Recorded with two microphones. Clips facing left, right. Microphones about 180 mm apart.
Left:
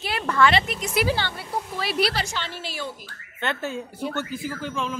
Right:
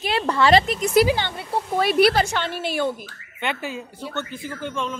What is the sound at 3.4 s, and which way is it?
Speech, 10° right (ahead or behind).